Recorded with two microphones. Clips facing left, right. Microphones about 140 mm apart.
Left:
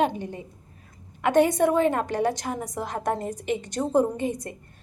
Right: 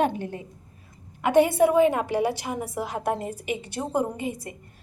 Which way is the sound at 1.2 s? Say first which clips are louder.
Right 1 dB; 5° right (ahead or behind).